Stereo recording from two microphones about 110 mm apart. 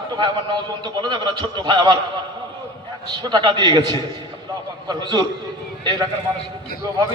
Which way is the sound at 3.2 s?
40° right (ahead or behind).